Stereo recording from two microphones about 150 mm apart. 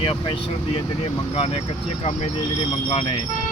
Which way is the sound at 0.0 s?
35° left (ahead or behind).